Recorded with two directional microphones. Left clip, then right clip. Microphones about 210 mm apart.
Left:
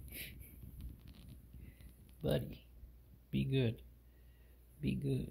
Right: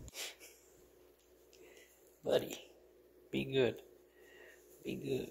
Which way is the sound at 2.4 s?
15° right (ahead or behind).